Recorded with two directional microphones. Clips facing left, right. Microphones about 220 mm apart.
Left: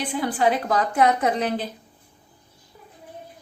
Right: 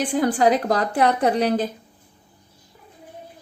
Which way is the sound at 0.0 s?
45° right (ahead or behind).